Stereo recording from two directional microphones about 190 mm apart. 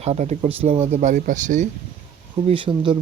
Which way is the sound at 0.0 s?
35° right (ahead or behind).